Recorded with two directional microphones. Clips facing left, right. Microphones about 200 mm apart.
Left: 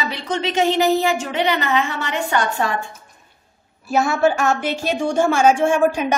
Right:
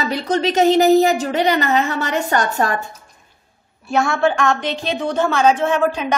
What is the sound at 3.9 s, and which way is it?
A woman's voice, 5° left (ahead or behind).